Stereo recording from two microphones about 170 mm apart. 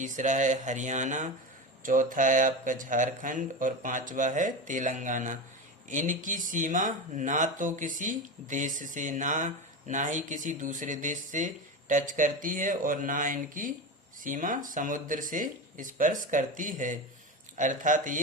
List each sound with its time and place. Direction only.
0.0 s speech: 45° right (ahead or behind)